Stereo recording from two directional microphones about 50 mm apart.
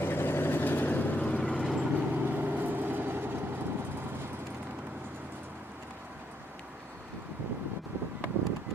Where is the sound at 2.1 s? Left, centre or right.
Right.